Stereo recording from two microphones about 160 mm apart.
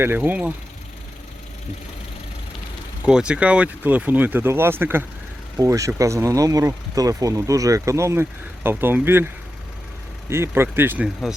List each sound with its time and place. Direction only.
0.0 s speech: 10° right (ahead or behind)
3.0 s speech: 5° right (ahead or behind)